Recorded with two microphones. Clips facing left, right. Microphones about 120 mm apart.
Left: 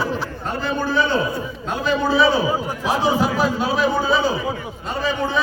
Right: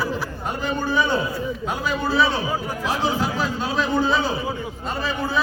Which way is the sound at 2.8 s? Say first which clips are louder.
Left 5 dB; 15° left (ahead or behind).